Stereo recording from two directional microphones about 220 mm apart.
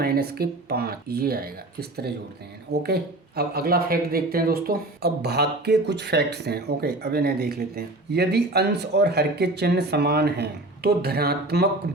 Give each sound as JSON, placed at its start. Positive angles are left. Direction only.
{"t": 0.0, "sound": "speech", "side_deg": -45}